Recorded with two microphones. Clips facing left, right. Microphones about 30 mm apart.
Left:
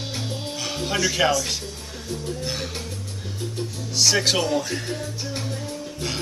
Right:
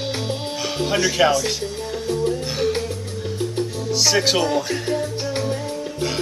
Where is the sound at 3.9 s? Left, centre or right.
Centre.